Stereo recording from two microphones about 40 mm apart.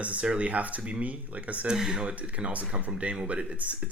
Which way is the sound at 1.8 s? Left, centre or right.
Centre.